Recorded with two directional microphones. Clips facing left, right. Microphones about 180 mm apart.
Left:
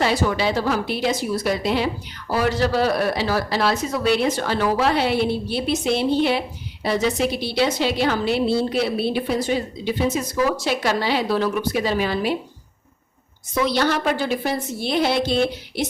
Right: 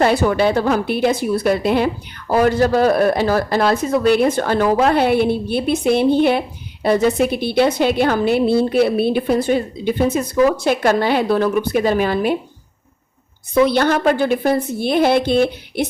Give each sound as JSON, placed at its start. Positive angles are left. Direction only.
{"t": 0.0, "sound": "a woman's voice", "side_deg": -55}
{"t": 13.5, "sound": "a woman's voice", "side_deg": -55}